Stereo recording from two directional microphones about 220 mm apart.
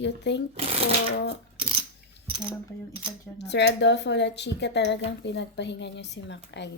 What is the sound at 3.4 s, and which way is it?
A woman's voice, 50° left (ahead or behind).